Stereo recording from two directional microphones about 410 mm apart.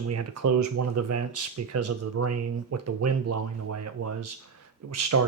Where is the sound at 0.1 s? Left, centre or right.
Right.